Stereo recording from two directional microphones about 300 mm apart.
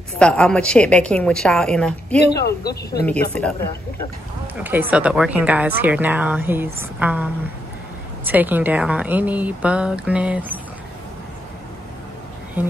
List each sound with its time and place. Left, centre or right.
0.2 s a woman's voice: centre
2.4 s speech: left
3.1 s a woman's voice: centre
4.6 s a woman's voice: centre
8.3 s a woman's voice: centre
12.6 s speech: centre